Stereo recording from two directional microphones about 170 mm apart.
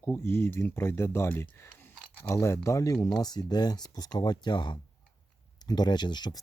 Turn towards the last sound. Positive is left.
turn(degrees=25)  # may be behind; listen again after turning